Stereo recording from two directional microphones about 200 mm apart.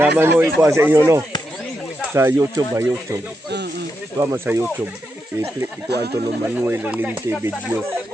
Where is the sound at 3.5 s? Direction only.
55° right (ahead or behind).